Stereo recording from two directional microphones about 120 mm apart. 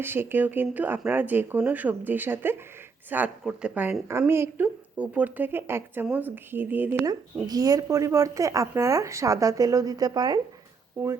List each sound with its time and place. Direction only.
0.0 s speech: 20° right (ahead or behind)
7.4 s a woman's voice: 30° right (ahead or behind)
11.0 s a woman's voice: 20° right (ahead or behind)